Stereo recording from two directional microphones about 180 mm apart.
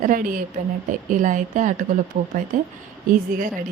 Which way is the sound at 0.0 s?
50° right (ahead or behind).